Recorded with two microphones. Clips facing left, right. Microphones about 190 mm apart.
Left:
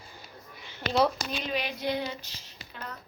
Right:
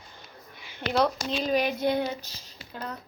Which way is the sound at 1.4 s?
45° right (ahead or behind).